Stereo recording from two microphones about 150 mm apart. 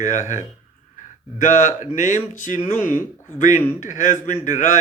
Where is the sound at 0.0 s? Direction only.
55° left (ahead or behind).